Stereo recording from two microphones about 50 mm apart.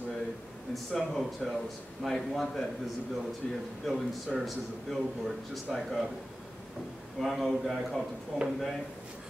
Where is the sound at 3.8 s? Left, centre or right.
Centre.